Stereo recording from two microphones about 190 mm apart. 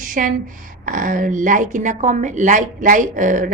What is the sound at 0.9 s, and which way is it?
A woman's voice, 45° right (ahead or behind).